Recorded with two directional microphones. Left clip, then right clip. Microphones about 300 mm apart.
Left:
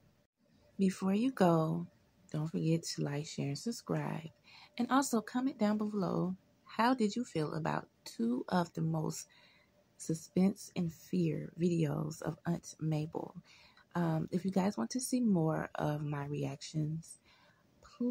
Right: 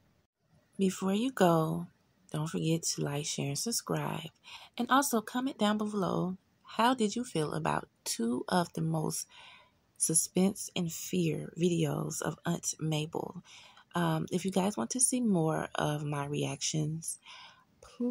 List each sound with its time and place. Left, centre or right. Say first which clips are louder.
0.7 s speech: right 3 dB; centre
16.7 s speech: right 4 dB; centre